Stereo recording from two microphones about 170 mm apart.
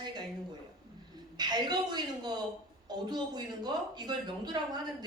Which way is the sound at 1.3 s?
25° right (ahead or behind).